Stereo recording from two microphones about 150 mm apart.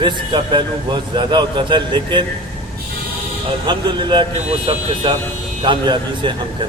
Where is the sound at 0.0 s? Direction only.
30° right (ahead or behind).